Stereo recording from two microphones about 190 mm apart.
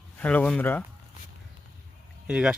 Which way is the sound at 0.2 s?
10° left (ahead or behind).